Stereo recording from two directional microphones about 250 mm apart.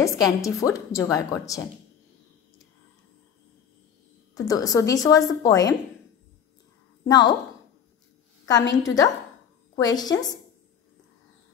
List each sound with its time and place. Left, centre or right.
0.0 s a woman's voice: centre
4.5 s a woman's voice: centre
7.1 s a woman's voice: centre
8.7 s a woman's voice: centre